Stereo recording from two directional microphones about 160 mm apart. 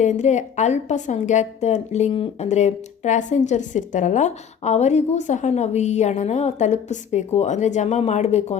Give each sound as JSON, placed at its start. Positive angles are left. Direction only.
{"t": 0.0, "sound": "a woman's voice", "side_deg": 50}